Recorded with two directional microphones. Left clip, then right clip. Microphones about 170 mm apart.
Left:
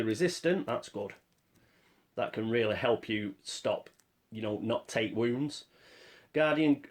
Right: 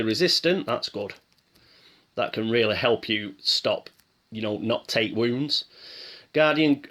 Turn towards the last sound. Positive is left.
turn(degrees=-25)  # may be behind; listen again after turning